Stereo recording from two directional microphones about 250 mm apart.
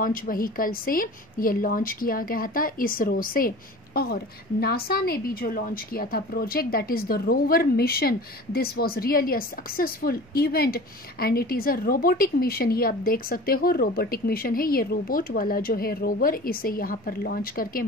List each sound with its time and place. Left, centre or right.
0.0 s a woman's voice: left